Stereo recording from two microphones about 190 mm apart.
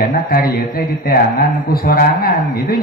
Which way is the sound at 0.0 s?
55° left (ahead or behind).